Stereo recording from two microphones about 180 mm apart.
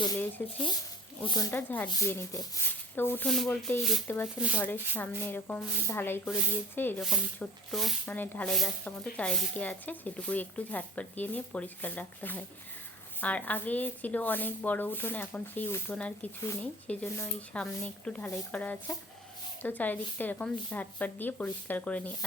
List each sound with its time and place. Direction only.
0.4 s speech: 10° left (ahead or behind)
1.2 s speech: 20° left (ahead or behind)